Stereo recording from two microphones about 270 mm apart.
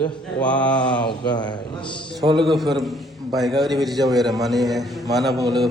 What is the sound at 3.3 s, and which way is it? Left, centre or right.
Speech, centre.